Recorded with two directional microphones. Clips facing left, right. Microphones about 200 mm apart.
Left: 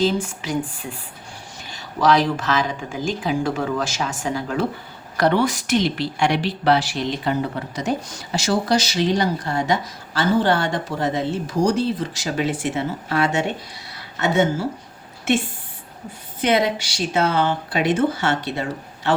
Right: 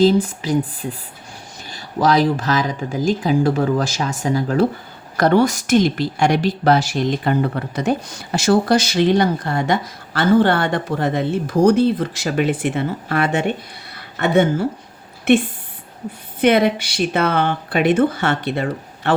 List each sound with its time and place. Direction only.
0.0 s a woman's voice: 35° right (ahead or behind); by 13.4 s 55° right (ahead or behind)
13.9 s a sound: 55° right (ahead or behind)
15.3 s a woman's voice: 60° right (ahead or behind)